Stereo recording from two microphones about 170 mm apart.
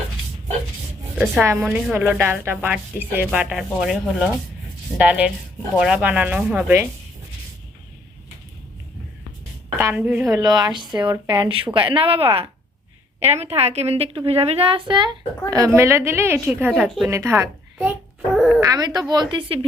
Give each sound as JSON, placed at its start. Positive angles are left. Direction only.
{"t": 1.4, "sound": "speech", "side_deg": -10}
{"t": 9.7, "sound": "a woman's voice", "side_deg": -10}
{"t": 18.6, "sound": "a woman's voice", "side_deg": -20}